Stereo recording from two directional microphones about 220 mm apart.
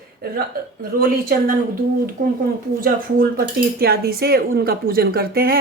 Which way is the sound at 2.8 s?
40° right (ahead or behind).